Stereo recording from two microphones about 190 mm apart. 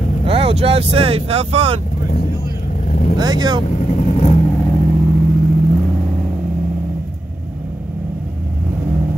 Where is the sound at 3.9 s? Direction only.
30° left (ahead or behind).